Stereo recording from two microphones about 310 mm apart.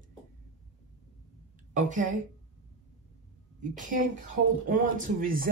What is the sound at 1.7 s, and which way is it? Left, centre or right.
Speech, right.